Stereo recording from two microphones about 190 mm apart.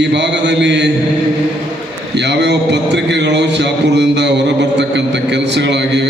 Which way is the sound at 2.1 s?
65° right (ahead or behind).